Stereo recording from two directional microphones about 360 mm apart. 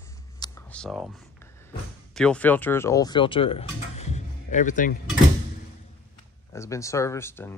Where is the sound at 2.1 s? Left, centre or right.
Centre.